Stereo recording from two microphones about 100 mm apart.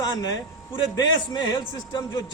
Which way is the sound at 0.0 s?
40° left (ahead or behind).